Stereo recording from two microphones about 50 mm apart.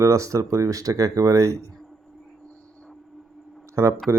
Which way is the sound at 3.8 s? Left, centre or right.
Right.